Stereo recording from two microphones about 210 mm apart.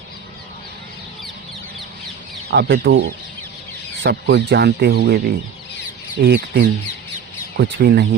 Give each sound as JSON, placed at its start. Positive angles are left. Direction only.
{"t": 2.5, "sound": "speech", "side_deg": -50}